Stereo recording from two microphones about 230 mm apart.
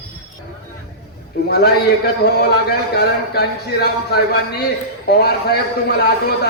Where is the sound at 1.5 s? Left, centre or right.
Left.